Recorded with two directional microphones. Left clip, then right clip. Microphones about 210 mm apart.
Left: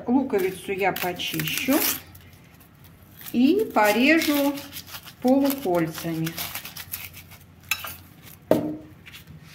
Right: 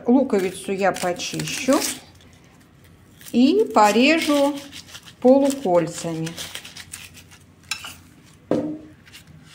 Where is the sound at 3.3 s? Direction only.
30° right (ahead or behind).